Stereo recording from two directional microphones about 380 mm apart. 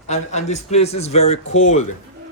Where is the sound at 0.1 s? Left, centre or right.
Centre.